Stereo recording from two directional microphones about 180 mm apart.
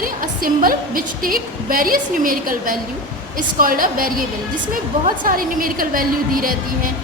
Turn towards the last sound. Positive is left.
turn(degrees=-50)  # may be behind; listen again after turning